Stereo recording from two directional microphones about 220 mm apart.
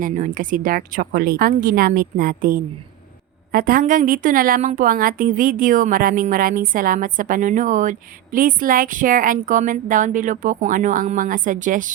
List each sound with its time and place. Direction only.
0.0 s a woman's voice: 40° right (ahead or behind)